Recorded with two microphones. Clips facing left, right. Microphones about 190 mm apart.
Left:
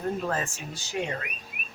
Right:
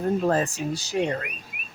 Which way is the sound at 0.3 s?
35° right (ahead or behind).